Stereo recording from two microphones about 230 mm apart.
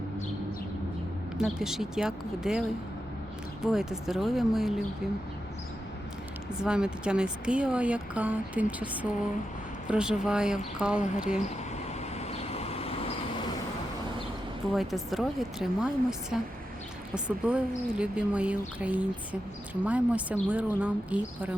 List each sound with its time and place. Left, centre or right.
1.4 s speech: centre
6.6 s speech: centre
12.1 s vehicle: left
14.7 s speech: centre